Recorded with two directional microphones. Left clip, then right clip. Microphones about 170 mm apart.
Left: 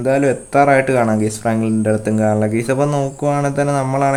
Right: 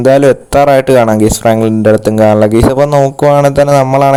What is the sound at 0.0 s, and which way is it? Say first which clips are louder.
Speech: right 9 dB; 45° right (ahead or behind).